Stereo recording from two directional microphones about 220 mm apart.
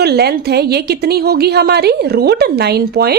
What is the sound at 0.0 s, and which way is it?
A woman's voice, 45° right (ahead or behind).